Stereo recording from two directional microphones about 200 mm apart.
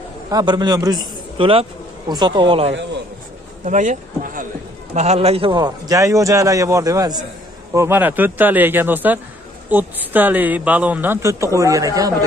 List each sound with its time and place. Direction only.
0.3 s a man's voice: 20° right (ahead or behind)
3.6 s speech: 35° right (ahead or behind); by 12.1 s 15° right (ahead or behind)